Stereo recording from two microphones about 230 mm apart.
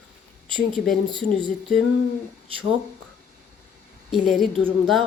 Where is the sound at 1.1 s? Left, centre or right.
Right.